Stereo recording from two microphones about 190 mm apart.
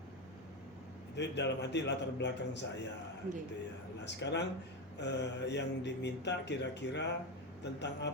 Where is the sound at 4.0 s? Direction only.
65° left (ahead or behind).